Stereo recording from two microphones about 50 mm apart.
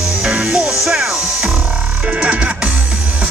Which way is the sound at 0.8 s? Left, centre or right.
Centre.